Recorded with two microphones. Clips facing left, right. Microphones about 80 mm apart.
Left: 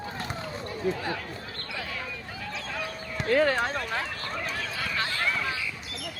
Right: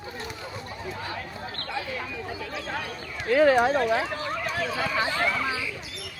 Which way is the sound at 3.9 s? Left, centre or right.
Centre.